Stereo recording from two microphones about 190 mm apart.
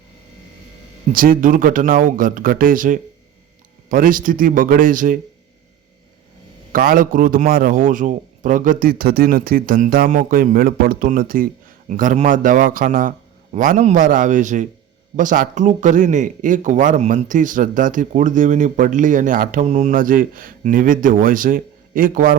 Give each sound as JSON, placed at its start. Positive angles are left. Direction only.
{"t": 1.1, "sound": "speech", "side_deg": -50}
{"t": 6.7, "sound": "speech", "side_deg": -45}